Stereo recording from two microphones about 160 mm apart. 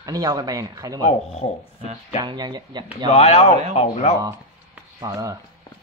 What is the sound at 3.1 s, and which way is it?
Speech, 40° left (ahead or behind).